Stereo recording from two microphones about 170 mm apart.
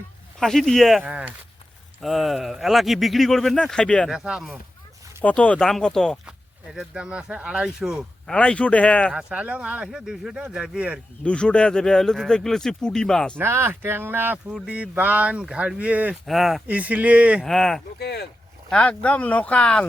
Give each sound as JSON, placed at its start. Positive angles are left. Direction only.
{"t": 0.3, "sound": "speech", "side_deg": 0}
{"t": 5.2, "sound": "speech", "side_deg": 10}
{"t": 8.4, "sound": "speech", "side_deg": 5}
{"t": 9.1, "sound": "speech", "side_deg": -5}
{"t": 11.2, "sound": "speech", "side_deg": 5}
{"t": 13.4, "sound": "speech", "side_deg": -15}
{"t": 17.4, "sound": "speech", "side_deg": 0}
{"t": 18.0, "sound": "speech", "side_deg": 70}
{"t": 18.7, "sound": "speech", "side_deg": 5}